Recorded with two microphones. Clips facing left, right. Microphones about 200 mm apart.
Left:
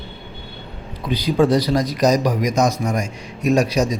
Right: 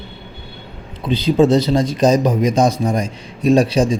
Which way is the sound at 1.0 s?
25° right (ahead or behind).